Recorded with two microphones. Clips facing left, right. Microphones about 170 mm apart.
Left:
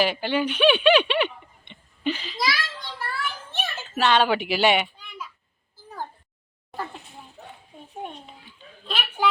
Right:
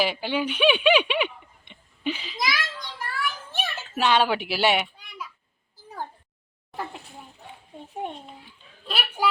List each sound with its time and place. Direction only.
0.0 s speech: 5° right (ahead or behind)
2.4 s children playing: 15° right (ahead or behind)
3.5 s a sound: 10° right (ahead or behind)
8.9 s speech: 10° right (ahead or behind)